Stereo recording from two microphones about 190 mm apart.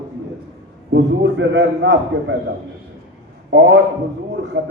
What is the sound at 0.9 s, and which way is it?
A man's voice, 80° right.